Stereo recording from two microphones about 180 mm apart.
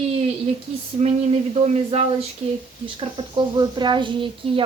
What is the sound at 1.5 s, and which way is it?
Speech, 35° right (ahead or behind).